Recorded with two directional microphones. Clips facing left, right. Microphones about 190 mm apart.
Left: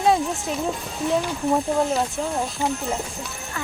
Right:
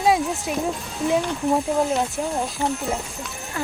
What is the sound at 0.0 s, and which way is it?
Music, 5° right (ahead or behind).